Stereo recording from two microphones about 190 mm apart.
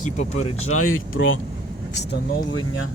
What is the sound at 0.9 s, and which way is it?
Speech, 90° left.